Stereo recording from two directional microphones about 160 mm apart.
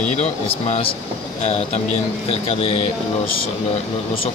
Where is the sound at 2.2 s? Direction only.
40° left (ahead or behind).